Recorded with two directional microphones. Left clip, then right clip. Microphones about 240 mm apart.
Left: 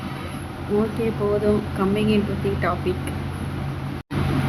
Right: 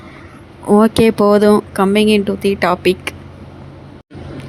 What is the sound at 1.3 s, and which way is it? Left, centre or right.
Speech, right.